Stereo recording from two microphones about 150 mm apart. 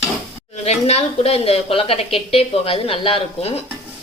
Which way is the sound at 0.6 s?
45° left (ahead or behind).